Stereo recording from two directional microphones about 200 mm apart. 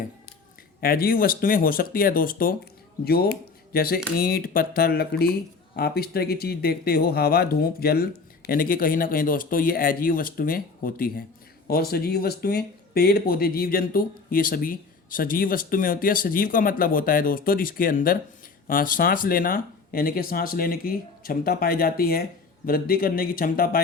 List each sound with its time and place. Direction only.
0.8 s speech: 50° left (ahead or behind)